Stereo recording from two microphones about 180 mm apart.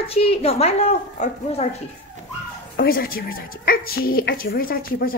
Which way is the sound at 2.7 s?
55° left (ahead or behind).